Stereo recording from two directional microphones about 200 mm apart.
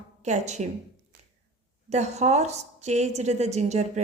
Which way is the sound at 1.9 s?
35° right (ahead or behind).